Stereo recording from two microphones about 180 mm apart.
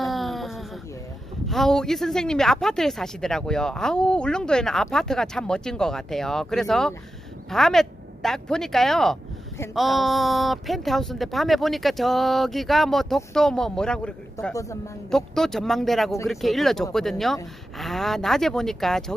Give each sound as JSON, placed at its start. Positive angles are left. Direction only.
{"t": 0.0, "sound": "a sound", "side_deg": 0}
{"t": 1.5, "sound": "speech", "side_deg": 0}
{"t": 14.5, "sound": "speech", "side_deg": 15}
{"t": 15.0, "sound": "speech", "side_deg": 0}